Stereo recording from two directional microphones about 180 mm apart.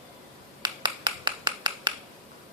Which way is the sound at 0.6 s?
25° right (ahead or behind).